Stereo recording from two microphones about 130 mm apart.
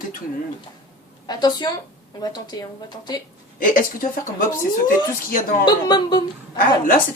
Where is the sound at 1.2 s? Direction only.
35° left (ahead or behind).